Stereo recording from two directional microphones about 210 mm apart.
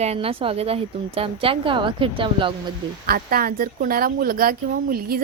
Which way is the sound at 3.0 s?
45° right (ahead or behind).